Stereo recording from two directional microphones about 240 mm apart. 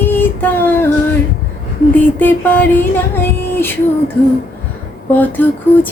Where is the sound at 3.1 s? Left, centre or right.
Centre.